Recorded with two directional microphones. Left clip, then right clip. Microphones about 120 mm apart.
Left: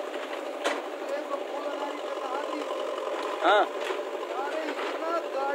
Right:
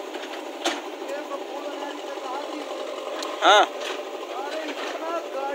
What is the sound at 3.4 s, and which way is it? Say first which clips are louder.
Boat: right 6 dB; 25° right (ahead or behind).